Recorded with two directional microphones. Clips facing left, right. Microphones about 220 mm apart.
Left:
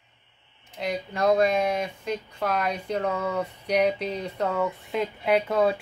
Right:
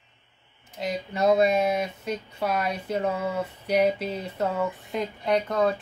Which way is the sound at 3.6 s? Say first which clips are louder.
Right 1 dB; 5° right (ahead or behind).